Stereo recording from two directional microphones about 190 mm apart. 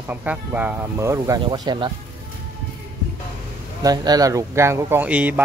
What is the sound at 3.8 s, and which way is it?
Speech, 20° right (ahead or behind).